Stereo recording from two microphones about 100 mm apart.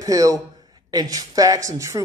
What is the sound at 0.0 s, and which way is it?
A man's voice, 35° right (ahead or behind).